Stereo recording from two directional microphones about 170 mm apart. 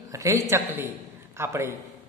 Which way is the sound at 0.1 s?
20° right (ahead or behind).